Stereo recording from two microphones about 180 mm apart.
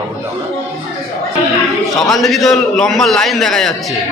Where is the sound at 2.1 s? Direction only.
Centre (ahead or behind).